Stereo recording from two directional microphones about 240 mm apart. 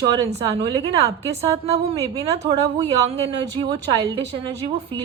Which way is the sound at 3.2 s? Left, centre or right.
Right.